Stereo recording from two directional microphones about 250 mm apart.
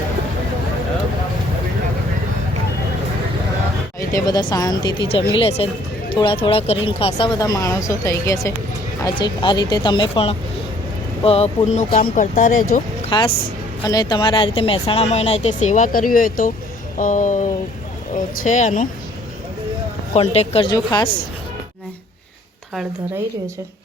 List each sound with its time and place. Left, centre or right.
4.1 s speech: centre
13.1 s speech: centre
20.1 s speech: left